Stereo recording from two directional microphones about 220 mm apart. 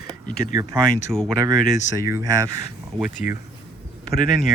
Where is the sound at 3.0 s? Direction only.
35° left (ahead or behind).